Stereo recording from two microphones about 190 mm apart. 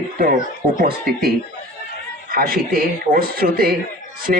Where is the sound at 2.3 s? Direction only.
50° right (ahead or behind).